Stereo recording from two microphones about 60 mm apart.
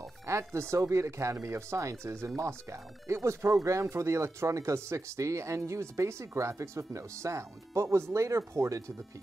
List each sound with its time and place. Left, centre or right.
0.3 s speech: right